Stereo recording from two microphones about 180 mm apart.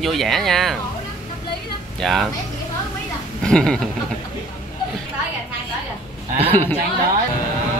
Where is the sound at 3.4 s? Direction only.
5° left (ahead or behind).